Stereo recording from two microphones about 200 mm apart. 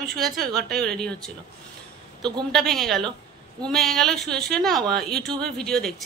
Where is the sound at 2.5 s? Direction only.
Centre (ahead or behind).